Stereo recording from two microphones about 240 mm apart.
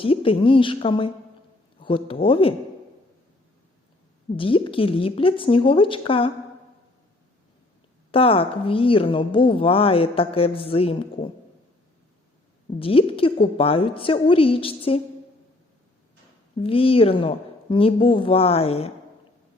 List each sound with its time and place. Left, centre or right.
0.0 s a woman's voice: left
4.3 s a woman's voice: left
8.1 s a woman's voice: left
12.8 s a woman's voice: left
16.6 s a woman's voice: left